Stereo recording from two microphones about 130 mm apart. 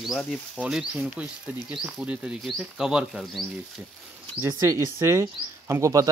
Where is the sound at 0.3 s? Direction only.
5° right (ahead or behind).